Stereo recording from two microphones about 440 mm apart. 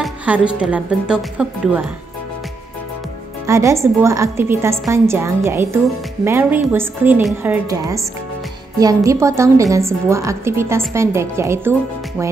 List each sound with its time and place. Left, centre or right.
0.0 s a woman's voice: centre
3.4 s a woman's voice: centre